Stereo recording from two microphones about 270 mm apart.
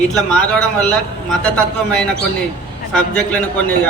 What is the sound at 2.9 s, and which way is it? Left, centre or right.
Speech, centre.